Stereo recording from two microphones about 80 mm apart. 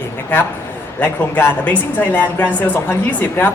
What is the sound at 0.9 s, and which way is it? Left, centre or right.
A woman's voice, left.